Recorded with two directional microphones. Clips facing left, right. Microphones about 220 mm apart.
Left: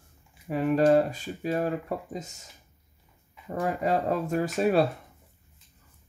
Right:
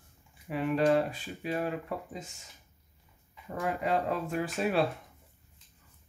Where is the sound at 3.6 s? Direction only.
40° left (ahead or behind).